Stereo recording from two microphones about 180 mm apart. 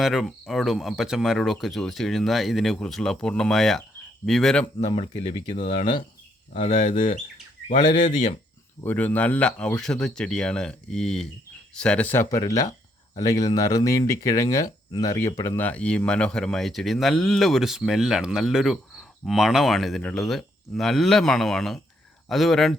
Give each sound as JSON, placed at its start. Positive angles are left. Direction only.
{"t": 0.0, "sound": "speech", "side_deg": 0}
{"t": 4.9, "sound": "speech", "side_deg": 30}
{"t": 6.7, "sound": "speech", "side_deg": 45}
{"t": 8.8, "sound": "speech", "side_deg": 10}